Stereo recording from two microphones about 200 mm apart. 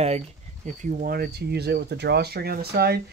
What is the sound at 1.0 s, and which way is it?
Speech, 50° right (ahead or behind).